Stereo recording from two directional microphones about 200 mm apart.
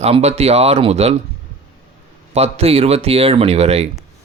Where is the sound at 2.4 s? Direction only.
30° right (ahead or behind).